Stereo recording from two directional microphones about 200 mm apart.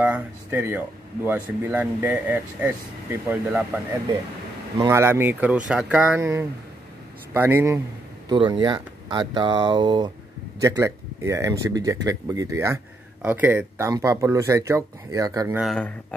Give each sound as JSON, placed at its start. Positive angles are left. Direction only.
{"t": 0.0, "sound": "speech", "side_deg": -10}
{"t": 8.3, "sound": "speech", "side_deg": -20}